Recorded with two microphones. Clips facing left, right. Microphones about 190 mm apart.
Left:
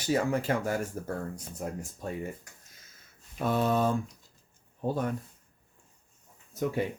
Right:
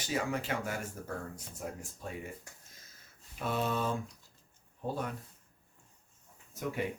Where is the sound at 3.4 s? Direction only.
40° left (ahead or behind).